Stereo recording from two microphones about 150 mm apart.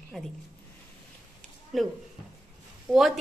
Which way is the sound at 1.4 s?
Centre (ahead or behind).